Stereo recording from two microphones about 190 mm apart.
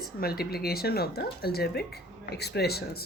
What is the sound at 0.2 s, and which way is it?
Speech, 55° left (ahead or behind).